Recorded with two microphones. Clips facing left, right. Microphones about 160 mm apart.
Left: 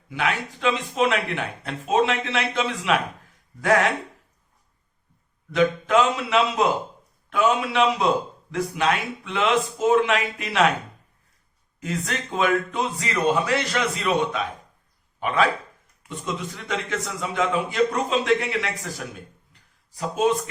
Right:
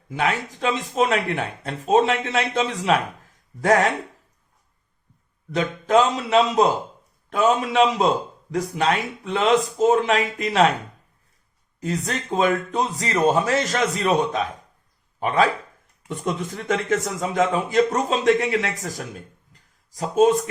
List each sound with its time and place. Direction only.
0.1 s speech: 40° right (ahead or behind)
5.5 s speech: 35° right (ahead or behind)
11.8 s speech: 35° right (ahead or behind)
16.6 s speech: 40° right (ahead or behind)